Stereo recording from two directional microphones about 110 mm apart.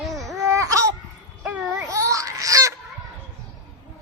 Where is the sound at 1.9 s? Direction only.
30° right (ahead or behind).